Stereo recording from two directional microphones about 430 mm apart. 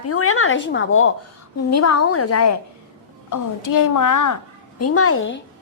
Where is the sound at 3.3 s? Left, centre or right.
Left.